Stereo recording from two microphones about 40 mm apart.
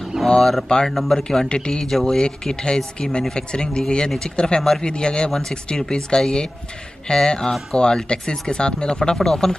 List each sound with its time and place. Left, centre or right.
0.3 s speech: centre
0.9 s speech: centre
1.5 s speech: left